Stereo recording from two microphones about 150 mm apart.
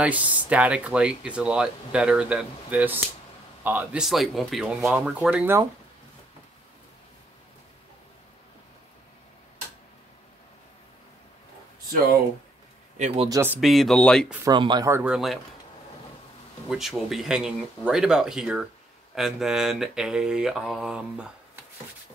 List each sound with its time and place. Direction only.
0.0 s speech: 10° right (ahead or behind)
3.6 s mantra: 10° right (ahead or behind)
5.0 s speech: 5° right (ahead or behind)
13.3 s speech: 15° right (ahead or behind)
13.6 s mantra: centre (ahead or behind)
14.5 s speech: 30° right (ahead or behind)
14.9 s speech: 15° right (ahead or behind)
16.6 s mantra: centre (ahead or behind)